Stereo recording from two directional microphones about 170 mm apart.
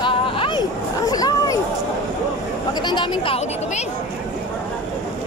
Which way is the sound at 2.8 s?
25° left (ahead or behind).